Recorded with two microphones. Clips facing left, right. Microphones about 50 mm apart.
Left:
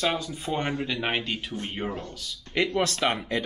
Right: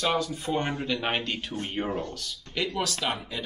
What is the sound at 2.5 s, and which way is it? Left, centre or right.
Speech, left.